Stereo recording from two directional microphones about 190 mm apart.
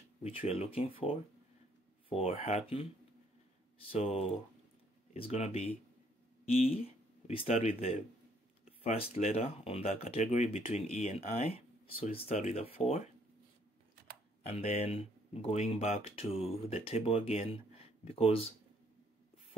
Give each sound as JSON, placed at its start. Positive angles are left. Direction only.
{"t": 0.5, "sound": "speech", "side_deg": 30}
{"t": 3.9, "sound": "speech", "side_deg": 30}
{"t": 6.7, "sound": "speech", "side_deg": 30}
{"t": 14.5, "sound": "speech", "side_deg": 35}